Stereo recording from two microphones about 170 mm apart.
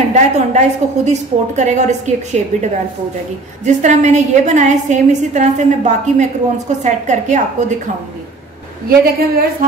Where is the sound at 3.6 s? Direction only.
45° right (ahead or behind).